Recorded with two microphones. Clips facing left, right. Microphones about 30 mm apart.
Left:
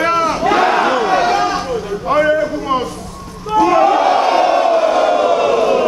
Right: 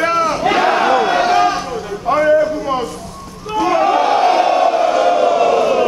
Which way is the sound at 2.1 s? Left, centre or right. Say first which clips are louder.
Right 1 dB; centre.